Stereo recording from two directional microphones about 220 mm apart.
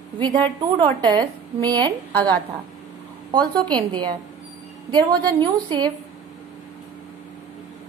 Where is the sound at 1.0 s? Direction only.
20° right (ahead or behind).